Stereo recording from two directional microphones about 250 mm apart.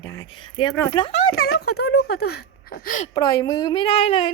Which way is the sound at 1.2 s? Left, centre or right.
Left.